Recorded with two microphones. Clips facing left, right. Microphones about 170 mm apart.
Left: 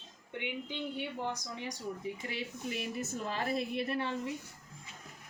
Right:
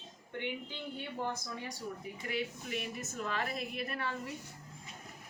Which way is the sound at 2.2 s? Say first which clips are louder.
Right 1 dB; 30° left (ahead or behind).